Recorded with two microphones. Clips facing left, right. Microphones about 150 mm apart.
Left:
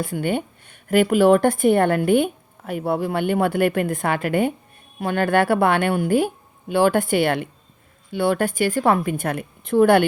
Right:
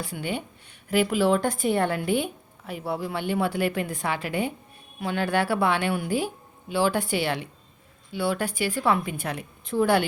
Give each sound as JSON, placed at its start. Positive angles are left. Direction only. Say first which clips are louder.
{"t": 0.0, "sound": "speech", "louder": "left 8 dB", "side_deg": 50}